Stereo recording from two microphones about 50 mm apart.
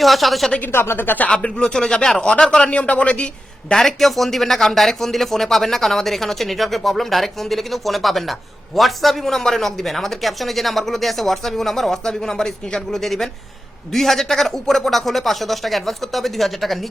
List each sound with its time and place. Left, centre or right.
0.0 s speech: centre
0.7 s speech: left
1.3 s a man's voice: centre
3.8 s speech: centre